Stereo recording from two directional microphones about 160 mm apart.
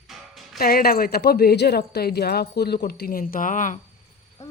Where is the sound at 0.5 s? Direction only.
75° left (ahead or behind); by 3.8 s 55° left (ahead or behind).